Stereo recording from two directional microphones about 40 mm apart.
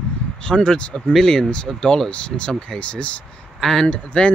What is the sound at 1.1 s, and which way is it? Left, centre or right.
Speech, centre.